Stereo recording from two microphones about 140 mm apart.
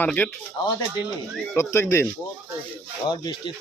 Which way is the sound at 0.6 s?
35° left (ahead or behind).